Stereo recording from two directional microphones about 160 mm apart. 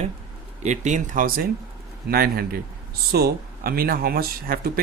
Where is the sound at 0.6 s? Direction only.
50° right (ahead or behind).